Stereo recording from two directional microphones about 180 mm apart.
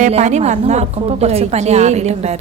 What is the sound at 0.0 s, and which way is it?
A woman's voice, 40° right (ahead or behind).